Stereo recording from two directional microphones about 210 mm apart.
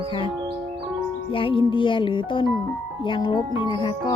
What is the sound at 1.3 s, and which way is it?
Speech, 25° left (ahead or behind).